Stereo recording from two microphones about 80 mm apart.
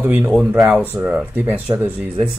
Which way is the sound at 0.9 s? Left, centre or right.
Right.